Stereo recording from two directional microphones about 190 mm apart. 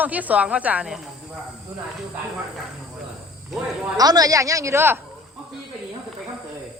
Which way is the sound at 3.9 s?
20° right (ahead or behind).